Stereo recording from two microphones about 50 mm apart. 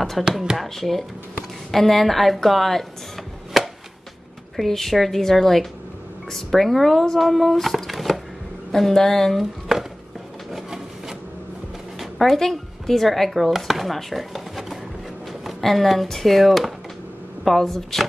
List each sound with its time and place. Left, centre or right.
0.2 s speech: centre
3.6 s chopping: centre
4.6 s a woman's voice: centre
9.4 s chopping: centre
10.5 s wood: centre
12.0 s speech: centre